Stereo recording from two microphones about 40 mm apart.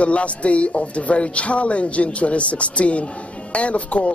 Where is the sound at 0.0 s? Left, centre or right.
Left.